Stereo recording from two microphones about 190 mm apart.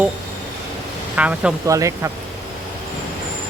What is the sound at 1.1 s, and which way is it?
Speech, 5° right (ahead or behind).